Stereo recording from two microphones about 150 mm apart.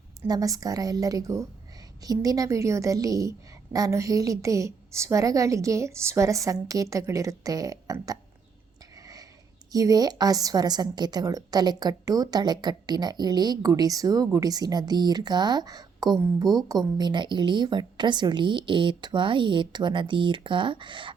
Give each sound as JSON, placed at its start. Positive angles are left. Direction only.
{"t": 0.3, "sound": "a woman's voice", "side_deg": -25}
{"t": 9.7, "sound": "a woman's voice", "side_deg": -25}